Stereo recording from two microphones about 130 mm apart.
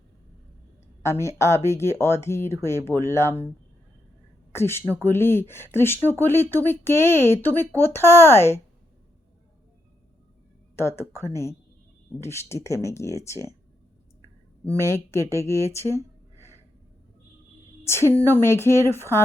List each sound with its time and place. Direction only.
1.0 s speech: 20° left (ahead or behind)
4.5 s speech: 20° left (ahead or behind)
10.8 s speech: 20° left (ahead or behind)
14.6 s speech: 20° left (ahead or behind)
17.8 s a woman's voice: 20° left (ahead or behind)